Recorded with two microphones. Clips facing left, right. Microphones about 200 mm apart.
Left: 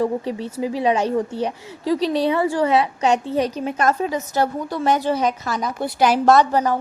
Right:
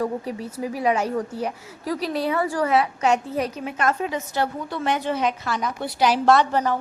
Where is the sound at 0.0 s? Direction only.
30° left (ahead or behind).